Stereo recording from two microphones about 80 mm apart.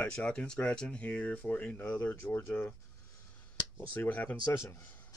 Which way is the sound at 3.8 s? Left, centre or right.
Left.